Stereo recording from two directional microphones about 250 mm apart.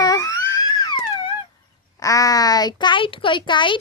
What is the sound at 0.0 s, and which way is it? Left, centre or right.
Music, centre.